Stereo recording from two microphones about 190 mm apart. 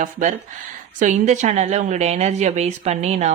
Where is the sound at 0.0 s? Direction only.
40° right (ahead or behind).